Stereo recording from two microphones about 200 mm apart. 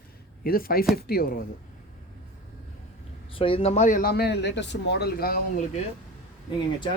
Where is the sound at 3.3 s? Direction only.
25° left (ahead or behind); by 5.4 s 50° left (ahead or behind).